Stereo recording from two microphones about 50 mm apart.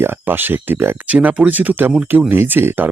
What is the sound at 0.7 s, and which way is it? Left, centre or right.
Speech, right.